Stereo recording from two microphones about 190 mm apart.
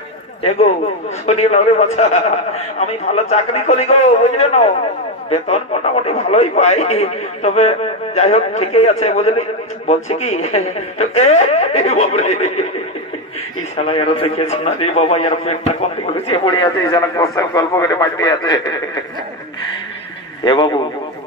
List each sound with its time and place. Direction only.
0.4 s a man's voice: 35° left (ahead or behind)
13.7 s a man's voice: 30° left (ahead or behind)
16.4 s speech: 20° left (ahead or behind)
20.4 s speech: 25° left (ahead or behind)